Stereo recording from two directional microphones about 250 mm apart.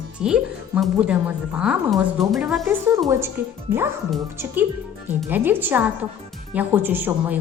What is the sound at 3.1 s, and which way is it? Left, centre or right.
A woman's voice, centre.